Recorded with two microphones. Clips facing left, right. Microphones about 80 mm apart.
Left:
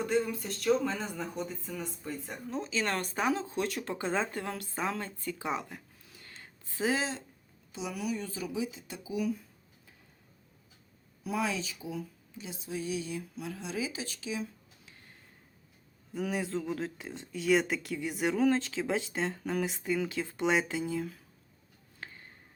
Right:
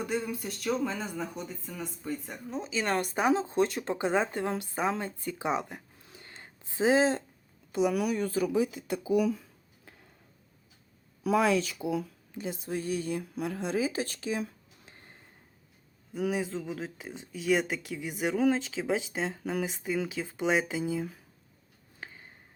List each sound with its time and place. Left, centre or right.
0.0 s speech: centre; by 7.1 s right
7.7 s speech: right
11.2 s speech: right
12.4 s a woman's voice: right
16.1 s speech: centre
22.0 s a sound: centre